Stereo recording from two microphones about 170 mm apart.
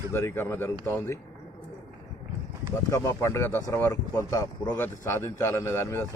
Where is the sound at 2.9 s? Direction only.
15° left (ahead or behind).